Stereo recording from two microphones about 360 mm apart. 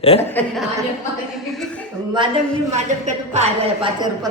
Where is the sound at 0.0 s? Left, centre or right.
Centre.